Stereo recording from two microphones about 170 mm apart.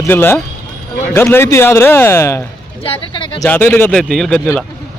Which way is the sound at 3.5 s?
10° left (ahead or behind).